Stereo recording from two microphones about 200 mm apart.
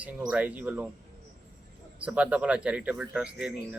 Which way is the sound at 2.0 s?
5° right (ahead or behind).